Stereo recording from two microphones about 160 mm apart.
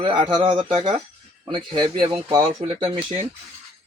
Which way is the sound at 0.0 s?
30° right (ahead or behind).